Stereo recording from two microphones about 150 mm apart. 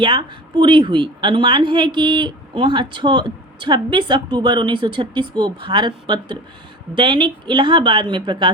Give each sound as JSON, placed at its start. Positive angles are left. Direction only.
{"t": 0.0, "sound": "speech", "side_deg": -35}